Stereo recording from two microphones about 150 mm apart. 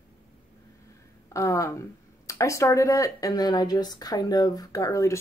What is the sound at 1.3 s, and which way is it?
Speech, 20° left (ahead or behind).